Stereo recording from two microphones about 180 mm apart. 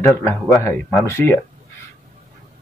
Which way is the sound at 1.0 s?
15° left (ahead or behind).